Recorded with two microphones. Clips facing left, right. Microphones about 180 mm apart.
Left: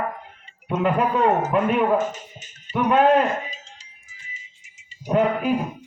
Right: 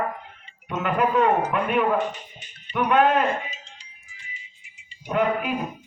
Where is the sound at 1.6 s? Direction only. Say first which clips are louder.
Left 3 dB; 40° left (ahead or behind).